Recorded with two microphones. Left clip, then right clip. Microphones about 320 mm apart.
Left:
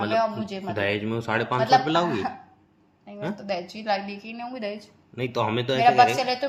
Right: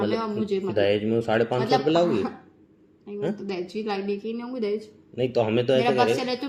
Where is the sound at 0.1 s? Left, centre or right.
Left.